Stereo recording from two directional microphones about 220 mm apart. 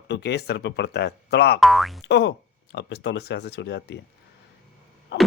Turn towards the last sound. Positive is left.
turn(degrees=50)  # may be behind; listen again after turning